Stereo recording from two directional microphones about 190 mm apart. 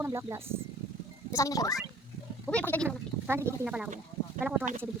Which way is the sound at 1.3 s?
15° left (ahead or behind).